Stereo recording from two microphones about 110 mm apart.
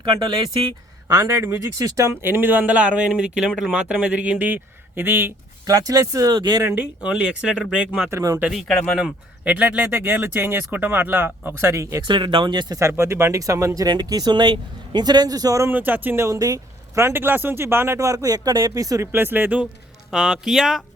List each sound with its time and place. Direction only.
0.0 s speech: 45° right (ahead or behind)
1.1 s speech: 25° right (ahead or behind)
5.6 s speech: 35° right (ahead or behind)
6.7 s speech: 10° right (ahead or behind)
8.1 s speech: 30° right (ahead or behind)
8.5 s speech: 5° left (ahead or behind)
9.4 s speech: 15° right (ahead or behind)
12.0 s speech: 50° right (ahead or behind)
12.8 s speech: 25° right (ahead or behind)
15.7 s speech: 15° right (ahead or behind)
19.1 s speech: 20° right (ahead or behind)